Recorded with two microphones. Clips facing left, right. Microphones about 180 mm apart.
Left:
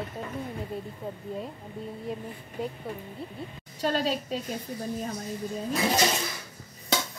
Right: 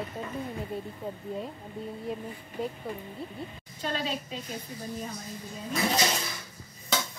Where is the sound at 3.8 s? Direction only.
40° left (ahead or behind).